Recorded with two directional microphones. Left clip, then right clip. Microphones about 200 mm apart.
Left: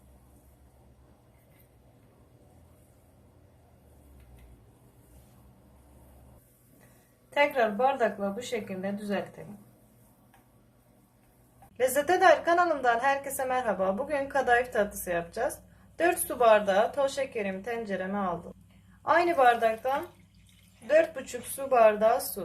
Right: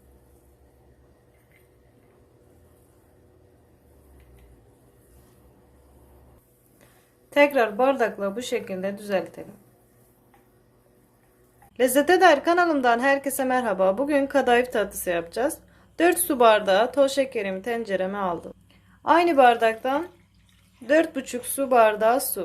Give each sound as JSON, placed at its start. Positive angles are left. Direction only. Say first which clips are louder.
{"t": 7.3, "sound": "a woman's voice", "louder": "right 6 dB", "side_deg": -50}
{"t": 11.8, "sound": "a woman's voice", "louder": "right 6 dB", "side_deg": -40}